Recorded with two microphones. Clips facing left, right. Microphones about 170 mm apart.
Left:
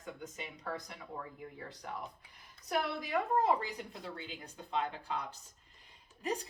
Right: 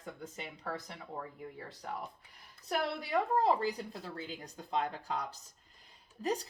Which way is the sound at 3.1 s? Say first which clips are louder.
Right 1 dB; 35° right (ahead or behind).